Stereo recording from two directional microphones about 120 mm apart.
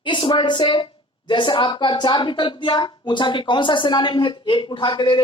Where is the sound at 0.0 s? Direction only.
45° left (ahead or behind).